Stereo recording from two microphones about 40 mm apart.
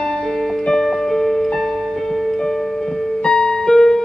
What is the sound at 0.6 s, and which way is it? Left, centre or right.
Music, centre.